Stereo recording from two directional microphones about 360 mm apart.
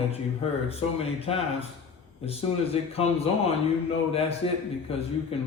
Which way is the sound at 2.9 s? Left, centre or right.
Centre.